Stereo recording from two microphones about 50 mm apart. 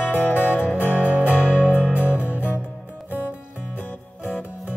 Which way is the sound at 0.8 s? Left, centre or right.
Right.